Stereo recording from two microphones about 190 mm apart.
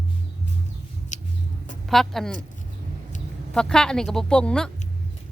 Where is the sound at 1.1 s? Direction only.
40° left (ahead or behind).